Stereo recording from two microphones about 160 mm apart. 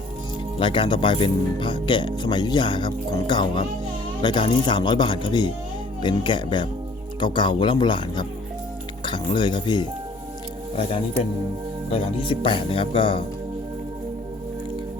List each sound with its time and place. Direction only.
0.6 s speech: 30° left (ahead or behind)